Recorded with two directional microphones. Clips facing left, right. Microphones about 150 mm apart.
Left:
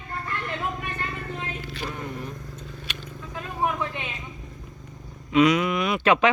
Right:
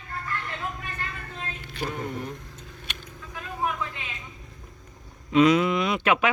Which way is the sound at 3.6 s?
25° left (ahead or behind).